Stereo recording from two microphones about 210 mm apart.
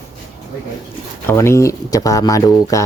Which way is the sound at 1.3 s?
10° left (ahead or behind).